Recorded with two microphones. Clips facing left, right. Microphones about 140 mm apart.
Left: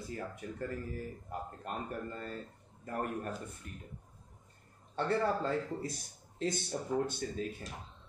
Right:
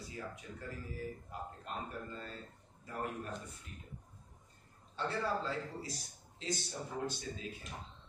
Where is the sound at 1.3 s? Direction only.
50° left (ahead or behind).